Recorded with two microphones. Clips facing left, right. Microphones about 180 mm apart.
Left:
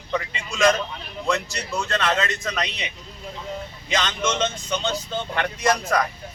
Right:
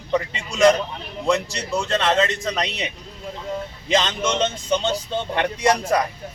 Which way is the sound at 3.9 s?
30° right (ahead or behind).